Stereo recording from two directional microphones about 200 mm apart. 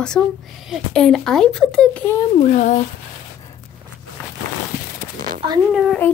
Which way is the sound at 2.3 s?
35° left (ahead or behind).